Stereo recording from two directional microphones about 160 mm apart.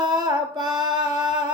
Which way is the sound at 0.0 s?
25° right (ahead or behind).